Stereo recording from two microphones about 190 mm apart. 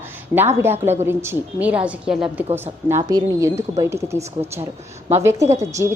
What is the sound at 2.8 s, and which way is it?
Speech, 15° right (ahead or behind).